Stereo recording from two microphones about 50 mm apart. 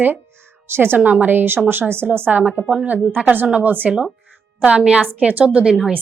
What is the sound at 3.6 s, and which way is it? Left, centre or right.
Speech, right.